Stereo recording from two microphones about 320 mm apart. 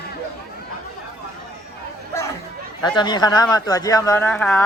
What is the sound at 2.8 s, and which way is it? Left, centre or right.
A man's voice, centre.